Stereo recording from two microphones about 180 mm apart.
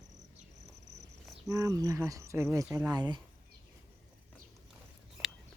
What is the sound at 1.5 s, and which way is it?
Speech, 20° right (ahead or behind).